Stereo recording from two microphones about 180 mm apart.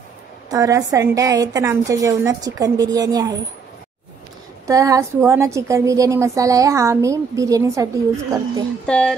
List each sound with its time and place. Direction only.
0.5 s a woman's voice: 20° right (ahead or behind)
4.6 s a woman's voice: 20° right (ahead or behind)
8.8 s speech: 5° left (ahead or behind)